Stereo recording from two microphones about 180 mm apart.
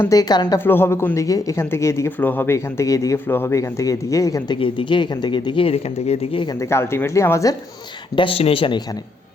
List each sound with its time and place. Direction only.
0.0 s speech: 20° left (ahead or behind)
8.1 s speech: 30° left (ahead or behind)